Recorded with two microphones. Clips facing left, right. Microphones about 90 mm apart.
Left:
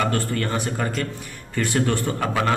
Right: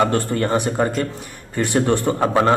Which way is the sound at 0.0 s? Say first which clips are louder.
Right 5 dB; 25° right (ahead or behind).